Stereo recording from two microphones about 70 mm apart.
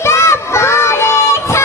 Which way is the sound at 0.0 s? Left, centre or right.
Left.